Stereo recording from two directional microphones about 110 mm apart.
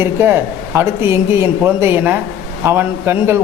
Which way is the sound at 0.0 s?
20° right (ahead or behind).